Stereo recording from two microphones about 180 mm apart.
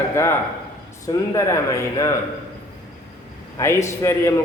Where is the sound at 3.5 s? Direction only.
15° left (ahead or behind).